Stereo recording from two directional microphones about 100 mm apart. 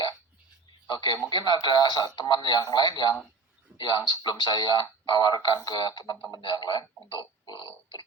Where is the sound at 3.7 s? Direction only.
20° right (ahead or behind).